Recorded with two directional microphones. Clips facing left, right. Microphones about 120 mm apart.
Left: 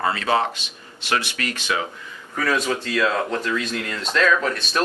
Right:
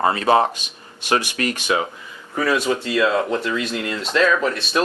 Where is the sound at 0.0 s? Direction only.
30° right (ahead or behind).